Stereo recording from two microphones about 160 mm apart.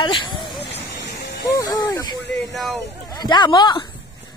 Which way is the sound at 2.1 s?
90° left.